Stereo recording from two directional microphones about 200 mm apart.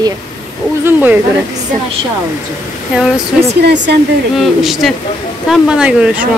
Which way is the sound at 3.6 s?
60° right (ahead or behind).